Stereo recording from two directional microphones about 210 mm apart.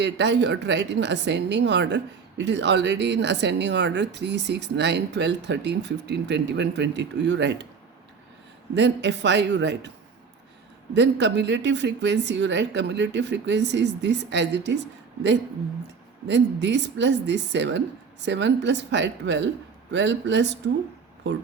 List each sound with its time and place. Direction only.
0.0 s speech: 55° right (ahead or behind)
8.7 s speech: 55° right (ahead or behind)
10.9 s speech: 55° right (ahead or behind)